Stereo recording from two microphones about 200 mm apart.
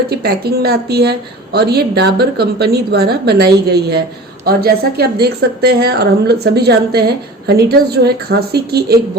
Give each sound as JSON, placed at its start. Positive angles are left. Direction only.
{"t": 0.1, "sound": "a woman's voice", "side_deg": -50}